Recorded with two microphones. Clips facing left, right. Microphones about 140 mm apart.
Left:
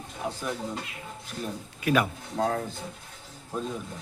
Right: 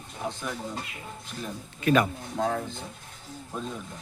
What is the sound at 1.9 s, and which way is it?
Speech, 5° left (ahead or behind).